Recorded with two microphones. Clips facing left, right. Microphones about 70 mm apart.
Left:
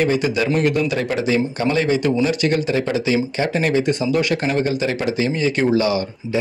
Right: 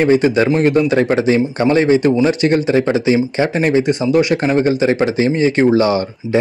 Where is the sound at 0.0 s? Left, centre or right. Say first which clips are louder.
Right 6 dB; right.